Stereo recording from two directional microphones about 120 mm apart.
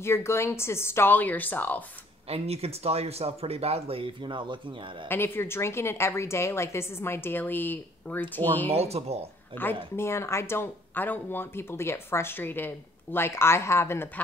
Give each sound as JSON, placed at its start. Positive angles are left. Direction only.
{"t": 0.0, "sound": "speech", "side_deg": 20}
{"t": 2.2, "sound": "speech", "side_deg": -60}
{"t": 5.0, "sound": "speech", "side_deg": 20}
{"t": 8.6, "sound": "speech", "side_deg": -60}
{"t": 9.9, "sound": "speech", "side_deg": 20}